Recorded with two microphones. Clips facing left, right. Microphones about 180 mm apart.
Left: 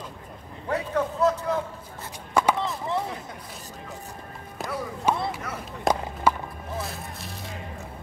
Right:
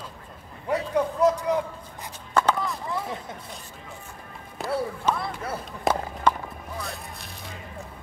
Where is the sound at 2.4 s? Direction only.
15° left (ahead or behind).